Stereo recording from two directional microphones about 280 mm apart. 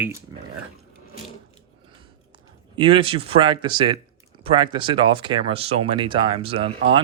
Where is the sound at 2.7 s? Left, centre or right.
Centre.